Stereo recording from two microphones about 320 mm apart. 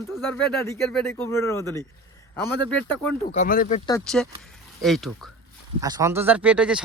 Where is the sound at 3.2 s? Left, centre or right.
Left.